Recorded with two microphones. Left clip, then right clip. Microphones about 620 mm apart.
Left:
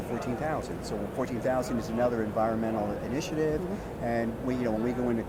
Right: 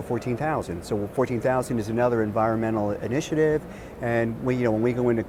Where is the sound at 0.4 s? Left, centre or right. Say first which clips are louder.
Right 5 dB; right.